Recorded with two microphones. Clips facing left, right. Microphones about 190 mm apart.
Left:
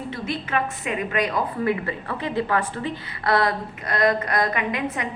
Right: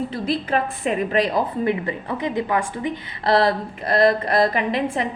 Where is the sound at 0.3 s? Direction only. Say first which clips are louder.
Right 3 dB; 35° right (ahead or behind); by 3.0 s 15° right (ahead or behind).